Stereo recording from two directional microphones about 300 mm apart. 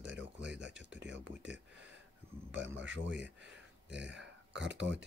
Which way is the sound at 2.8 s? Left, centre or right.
Right.